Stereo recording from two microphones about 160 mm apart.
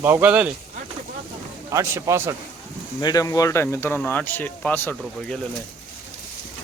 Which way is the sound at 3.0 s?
20° left (ahead or behind).